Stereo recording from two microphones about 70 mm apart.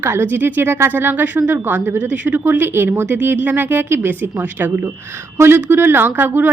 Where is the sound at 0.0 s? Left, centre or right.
Right.